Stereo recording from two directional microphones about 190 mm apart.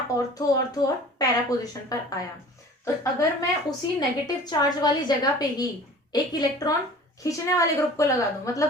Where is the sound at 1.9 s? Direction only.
20° left (ahead or behind).